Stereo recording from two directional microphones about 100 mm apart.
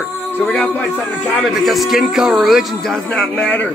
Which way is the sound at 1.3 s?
Centre (ahead or behind).